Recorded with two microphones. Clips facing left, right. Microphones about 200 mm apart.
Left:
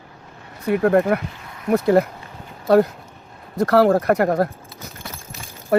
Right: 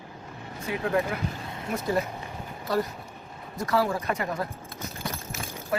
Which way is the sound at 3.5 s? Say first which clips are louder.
Left 11 dB; 65° left (ahead or behind).